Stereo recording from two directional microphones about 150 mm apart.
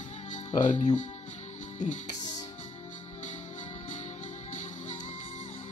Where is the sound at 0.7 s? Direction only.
55° left (ahead or behind).